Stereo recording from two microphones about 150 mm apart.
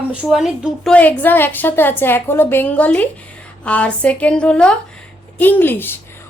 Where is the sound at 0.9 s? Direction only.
10° left (ahead or behind).